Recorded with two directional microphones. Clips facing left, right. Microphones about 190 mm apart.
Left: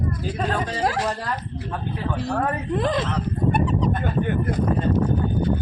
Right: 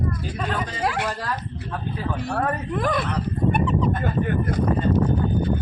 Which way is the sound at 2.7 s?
25° left (ahead or behind).